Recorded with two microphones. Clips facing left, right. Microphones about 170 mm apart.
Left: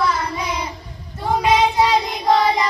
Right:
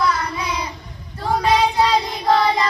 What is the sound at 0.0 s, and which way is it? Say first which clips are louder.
Child singing: even; 25° left (ahead or behind).